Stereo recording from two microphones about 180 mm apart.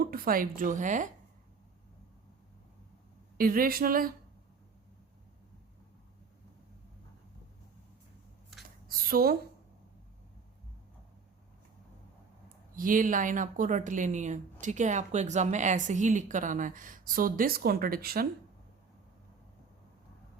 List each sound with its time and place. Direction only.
0.0 s speech: 55° right (ahead or behind)
3.3 s speech: 50° right (ahead or behind)
8.9 s speech: 55° right (ahead or behind)
12.7 s speech: 50° right (ahead or behind)